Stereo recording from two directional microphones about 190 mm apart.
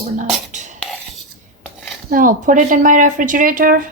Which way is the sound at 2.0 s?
45° right (ahead or behind).